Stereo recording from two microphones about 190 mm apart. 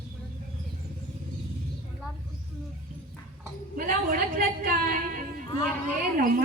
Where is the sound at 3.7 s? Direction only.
50° right (ahead or behind).